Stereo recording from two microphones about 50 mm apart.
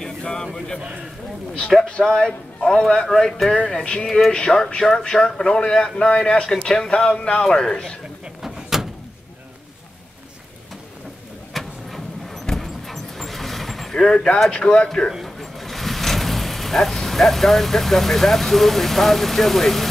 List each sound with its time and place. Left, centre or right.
0.0 s a sound: centre
1.9 s a man's voice: centre
3.1 s speech: centre
3.5 s a man's voice: centre
8.4 s door: centre
11.5 s vehicle: centre
14.5 s a man's voice: centre
15.0 s speech: centre